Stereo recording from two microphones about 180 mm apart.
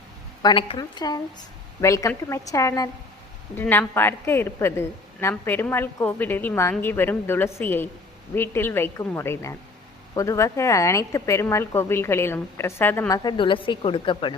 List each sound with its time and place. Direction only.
0.4 s a woman's voice: 25° left (ahead or behind)